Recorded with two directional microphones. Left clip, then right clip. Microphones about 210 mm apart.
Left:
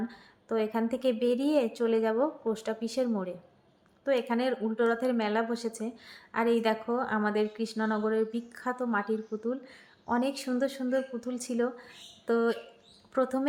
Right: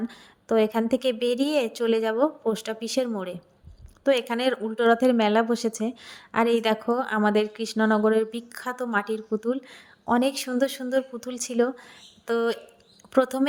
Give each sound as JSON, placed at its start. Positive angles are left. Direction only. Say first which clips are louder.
{"t": 0.1, "sound": "speech", "louder": "right 8 dB", "side_deg": -35}